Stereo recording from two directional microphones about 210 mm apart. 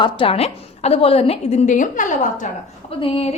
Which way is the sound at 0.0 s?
25° left (ahead or behind).